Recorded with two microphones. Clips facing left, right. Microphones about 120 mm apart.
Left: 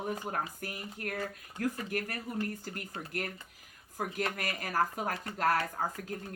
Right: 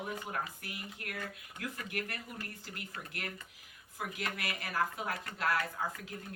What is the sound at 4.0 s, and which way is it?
Speech, 40° left (ahead or behind).